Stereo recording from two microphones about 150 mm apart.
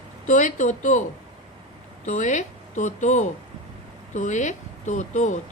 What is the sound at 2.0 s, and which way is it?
A woman's voice, 55° left (ahead or behind).